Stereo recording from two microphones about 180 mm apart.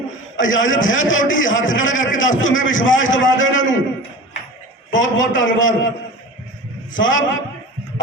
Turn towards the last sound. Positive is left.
turn(degrees=90)